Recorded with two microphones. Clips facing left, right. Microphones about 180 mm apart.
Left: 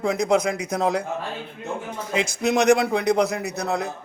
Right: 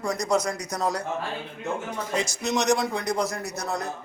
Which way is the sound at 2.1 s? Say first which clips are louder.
Left 5 dB; 55° left (ahead or behind).